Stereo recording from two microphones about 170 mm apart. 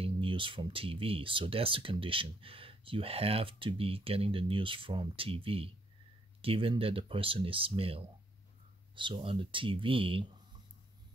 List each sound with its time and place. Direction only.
0.0 s speech: 30° right (ahead or behind)